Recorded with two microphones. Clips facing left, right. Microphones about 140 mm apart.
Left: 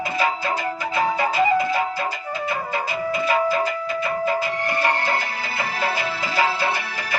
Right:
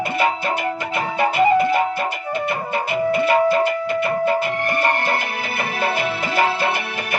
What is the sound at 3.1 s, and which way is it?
Music, 65° right (ahead or behind).